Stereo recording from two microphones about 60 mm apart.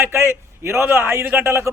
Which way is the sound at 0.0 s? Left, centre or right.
Right.